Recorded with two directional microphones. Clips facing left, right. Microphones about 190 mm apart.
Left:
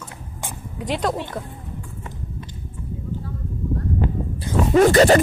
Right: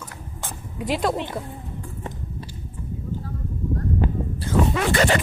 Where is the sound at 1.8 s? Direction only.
35° right (ahead or behind).